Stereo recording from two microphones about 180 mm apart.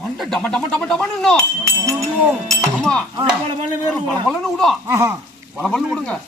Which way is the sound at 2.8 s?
5° left (ahead or behind).